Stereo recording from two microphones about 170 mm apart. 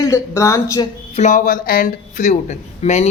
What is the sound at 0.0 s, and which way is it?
Speech, 15° left (ahead or behind).